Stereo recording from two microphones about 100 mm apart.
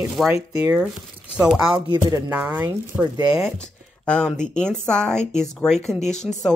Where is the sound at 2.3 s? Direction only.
20° right (ahead or behind).